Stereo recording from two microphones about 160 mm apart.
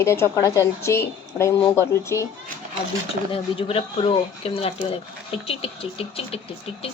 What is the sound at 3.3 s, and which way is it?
Speech, 35° left (ahead or behind).